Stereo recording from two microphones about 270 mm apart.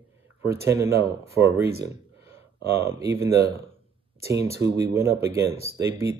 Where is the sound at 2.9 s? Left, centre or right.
Centre.